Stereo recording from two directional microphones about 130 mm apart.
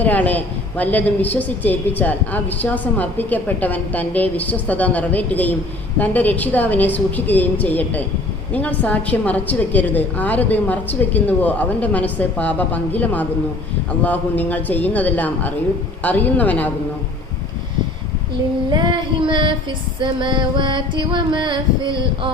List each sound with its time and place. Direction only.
0.0 s a woman's voice: 10° left (ahead or behind)
18.7 s music: 35° right (ahead or behind)